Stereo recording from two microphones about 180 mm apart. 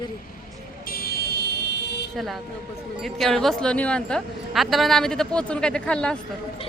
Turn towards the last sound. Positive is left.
turn(degrees=5)  # may be behind; listen again after turning